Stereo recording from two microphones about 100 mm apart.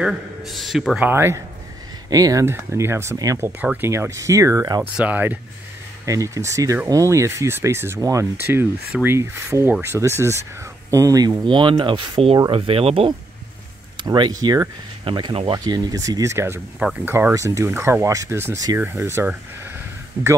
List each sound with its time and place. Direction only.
0.0 s a man's voice: centre (ahead or behind)
0.9 s speech: 20° right (ahead or behind)
2.0 s speech: 35° right (ahead or behind)
2.4 s speech: 25° right (ahead or behind)
4.9 s speech: 15° right (ahead or behind)
6.0 s speech: 30° right (ahead or behind)
8.5 s speech: 20° right (ahead or behind); by 11.3 s 35° right (ahead or behind)
11.4 s speech: 55° right (ahead or behind); by 13.1 s 70° right (ahead or behind)
14.0 s speech: 45° right (ahead or behind)
15.0 s speech: 50° right (ahead or behind); by 17.3 s 20° right (ahead or behind)
17.3 s speech: 30° right (ahead or behind)